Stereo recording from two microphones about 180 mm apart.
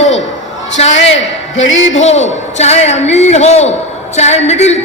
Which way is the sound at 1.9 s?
40° left (ahead or behind).